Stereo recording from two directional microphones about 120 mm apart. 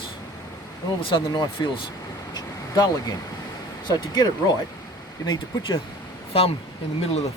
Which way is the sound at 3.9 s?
35° left (ahead or behind).